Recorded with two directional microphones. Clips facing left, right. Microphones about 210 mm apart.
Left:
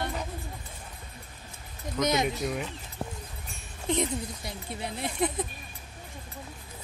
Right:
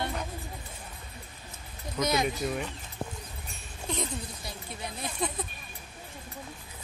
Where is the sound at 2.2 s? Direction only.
Centre (ahead or behind).